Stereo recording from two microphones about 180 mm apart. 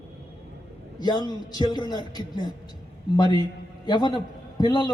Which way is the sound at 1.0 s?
25° left (ahead or behind).